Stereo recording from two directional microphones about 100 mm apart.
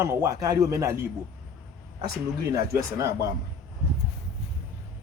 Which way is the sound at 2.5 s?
35° right (ahead or behind).